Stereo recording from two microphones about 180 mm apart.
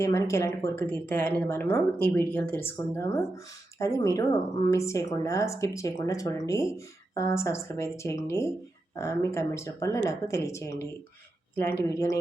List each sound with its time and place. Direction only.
0.0 s a woman's voice: 15° left (ahead or behind)